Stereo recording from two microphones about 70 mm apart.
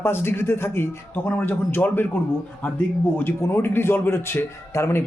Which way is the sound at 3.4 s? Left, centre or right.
Left.